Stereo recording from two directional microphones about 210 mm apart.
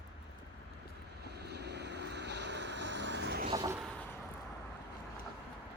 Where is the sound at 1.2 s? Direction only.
50° right (ahead or behind).